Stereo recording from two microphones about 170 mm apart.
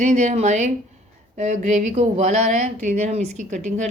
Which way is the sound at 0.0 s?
45° right (ahead or behind).